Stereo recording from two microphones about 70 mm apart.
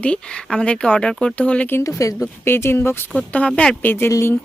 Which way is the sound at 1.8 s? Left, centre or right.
Left.